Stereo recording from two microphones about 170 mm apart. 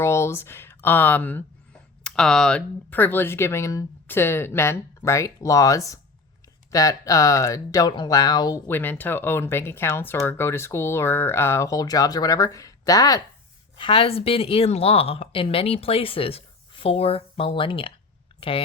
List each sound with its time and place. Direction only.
0.0 s speech: 15° left (ahead or behind)
13.7 s speech: 30° left (ahead or behind)